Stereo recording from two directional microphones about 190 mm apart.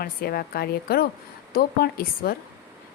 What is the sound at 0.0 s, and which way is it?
Speech, 50° left (ahead or behind).